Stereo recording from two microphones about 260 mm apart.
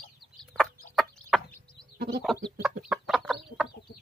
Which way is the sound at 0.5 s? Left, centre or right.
Centre.